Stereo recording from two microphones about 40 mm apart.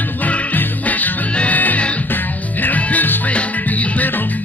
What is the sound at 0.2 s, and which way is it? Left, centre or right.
Music, left.